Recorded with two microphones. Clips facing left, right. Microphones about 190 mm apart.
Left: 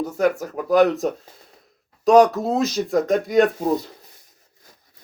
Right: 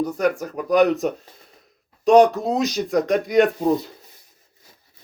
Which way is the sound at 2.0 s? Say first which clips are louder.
Even; centre (ahead or behind).